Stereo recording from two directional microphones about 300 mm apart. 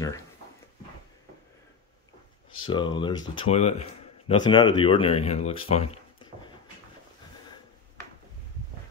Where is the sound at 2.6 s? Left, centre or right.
Centre.